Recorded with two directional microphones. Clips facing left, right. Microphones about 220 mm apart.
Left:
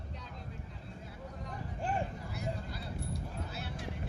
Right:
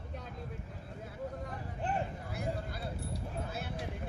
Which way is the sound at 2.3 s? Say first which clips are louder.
Right 2 dB; 55° right (ahead or behind).